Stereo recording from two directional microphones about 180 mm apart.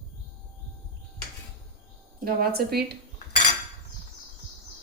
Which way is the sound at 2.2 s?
60° right (ahead or behind).